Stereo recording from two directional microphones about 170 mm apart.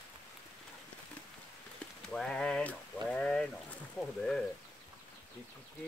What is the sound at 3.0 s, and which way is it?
Sheep, 5° left (ahead or behind).